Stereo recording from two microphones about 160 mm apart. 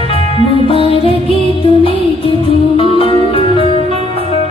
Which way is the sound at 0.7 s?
35° left (ahead or behind).